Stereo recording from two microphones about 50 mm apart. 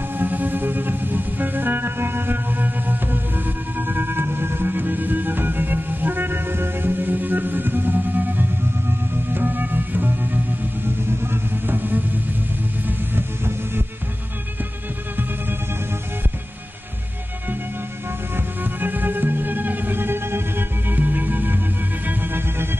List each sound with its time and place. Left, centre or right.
0.2 s music: right
18.3 s music: right